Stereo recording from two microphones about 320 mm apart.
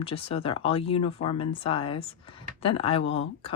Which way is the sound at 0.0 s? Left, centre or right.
Centre.